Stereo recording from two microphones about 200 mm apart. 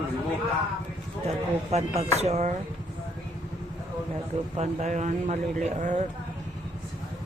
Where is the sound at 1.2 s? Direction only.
35° right (ahead or behind).